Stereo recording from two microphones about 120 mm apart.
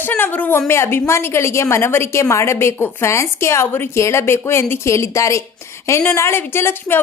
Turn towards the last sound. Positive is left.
turn(degrees=20)  # may be behind; listen again after turning